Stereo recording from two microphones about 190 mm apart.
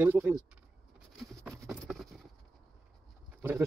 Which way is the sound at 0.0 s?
10° right (ahead or behind).